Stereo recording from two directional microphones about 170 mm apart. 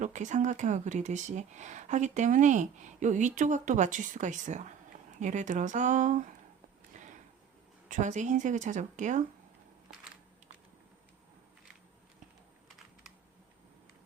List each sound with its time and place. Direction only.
0.0 s speech: 45° right (ahead or behind)
7.9 s speech: 45° right (ahead or behind)